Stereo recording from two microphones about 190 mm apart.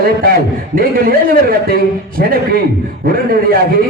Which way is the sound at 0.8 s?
50° right (ahead or behind).